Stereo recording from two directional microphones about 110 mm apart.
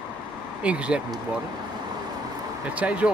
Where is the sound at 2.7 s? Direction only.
10° right (ahead or behind).